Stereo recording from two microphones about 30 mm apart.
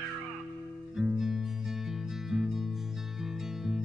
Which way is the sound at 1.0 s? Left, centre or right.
Centre.